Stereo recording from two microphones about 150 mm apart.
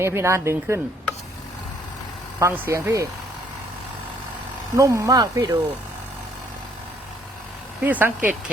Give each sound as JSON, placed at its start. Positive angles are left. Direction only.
{"t": 0.0, "sound": "speech", "side_deg": -15}
{"t": 2.4, "sound": "speech", "side_deg": -20}
{"t": 4.8, "sound": "speech", "side_deg": -20}
{"t": 7.9, "sound": "speech", "side_deg": -10}